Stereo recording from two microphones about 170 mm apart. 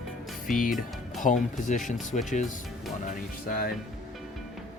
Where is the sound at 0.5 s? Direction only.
55° left (ahead or behind).